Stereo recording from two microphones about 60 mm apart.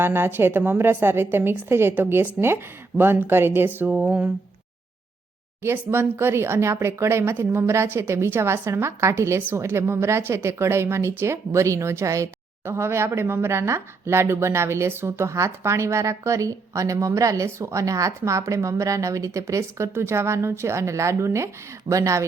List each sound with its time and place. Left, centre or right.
0.0 s a woman's voice: right
5.7 s speech: right
12.6 s a woman's voice: right
19.9 s speech: right